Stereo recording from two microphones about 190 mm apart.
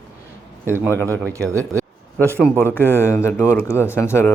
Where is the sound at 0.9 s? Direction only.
10° left (ahead or behind).